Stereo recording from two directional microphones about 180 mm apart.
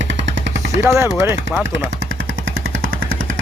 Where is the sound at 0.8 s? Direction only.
15° right (ahead or behind).